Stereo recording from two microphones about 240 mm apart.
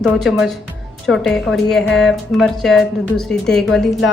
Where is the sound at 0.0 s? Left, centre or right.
Centre.